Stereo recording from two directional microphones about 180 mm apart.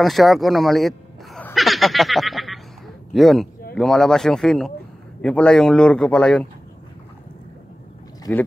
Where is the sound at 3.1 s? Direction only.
Centre (ahead or behind).